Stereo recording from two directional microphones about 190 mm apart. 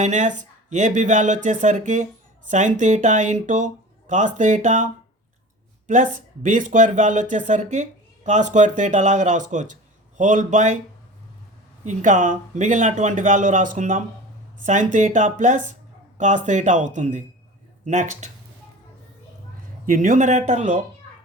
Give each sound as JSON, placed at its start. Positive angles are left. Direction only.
{"t": 0.0, "sound": "speech", "side_deg": -40}
{"t": 5.9, "sound": "speech", "side_deg": -40}
{"t": 11.9, "sound": "speech", "side_deg": -40}
{"t": 19.8, "sound": "speech", "side_deg": -45}